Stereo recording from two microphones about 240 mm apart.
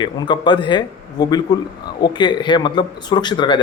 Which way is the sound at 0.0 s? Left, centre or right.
Centre.